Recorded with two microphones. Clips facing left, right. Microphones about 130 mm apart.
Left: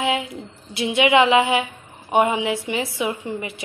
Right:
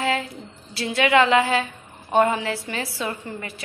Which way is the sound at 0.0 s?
15° left (ahead or behind).